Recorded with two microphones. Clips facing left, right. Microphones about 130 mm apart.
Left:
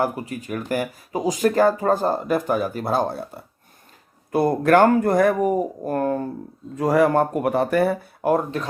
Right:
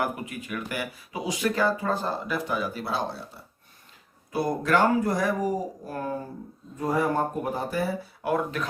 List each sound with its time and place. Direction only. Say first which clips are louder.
0.0 s speech: left 5 dB; 35° left (ahead or behind); by 6.2 s 60° left (ahead or behind)
6.7 s speech: left 8 dB; 85° left; by 7.9 s 60° left (ahead or behind)
8.2 s speech: left 6 dB; 40° left (ahead or behind)